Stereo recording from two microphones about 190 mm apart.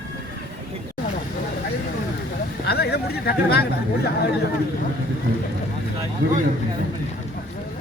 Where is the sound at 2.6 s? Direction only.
55° left (ahead or behind).